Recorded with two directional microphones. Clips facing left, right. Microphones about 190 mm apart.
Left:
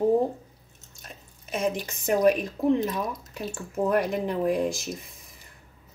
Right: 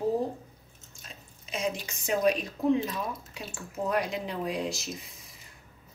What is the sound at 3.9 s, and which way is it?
Speech, 55° left (ahead or behind).